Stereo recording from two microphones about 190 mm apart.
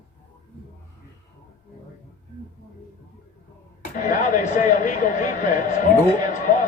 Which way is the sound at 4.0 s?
40° left (ahead or behind).